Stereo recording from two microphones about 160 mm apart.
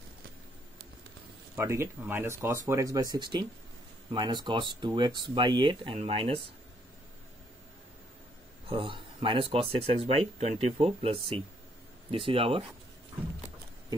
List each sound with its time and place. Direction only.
1.6 s speech: 15° right (ahead or behind); by 6.4 s 35° right (ahead or behind)
8.6 s speech: 30° right (ahead or behind)